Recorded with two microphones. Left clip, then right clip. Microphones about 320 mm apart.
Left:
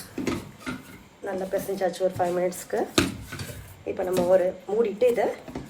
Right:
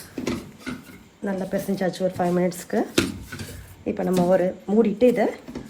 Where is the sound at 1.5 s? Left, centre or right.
Right.